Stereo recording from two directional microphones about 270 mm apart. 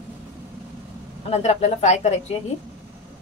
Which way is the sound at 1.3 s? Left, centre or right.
Left.